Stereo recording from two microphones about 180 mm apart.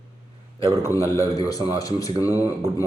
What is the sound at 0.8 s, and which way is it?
Speech, 15° left (ahead or behind).